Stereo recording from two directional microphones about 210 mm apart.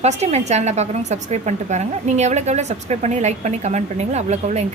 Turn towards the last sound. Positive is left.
turn(degrees=-30)  # may be behind; listen again after turning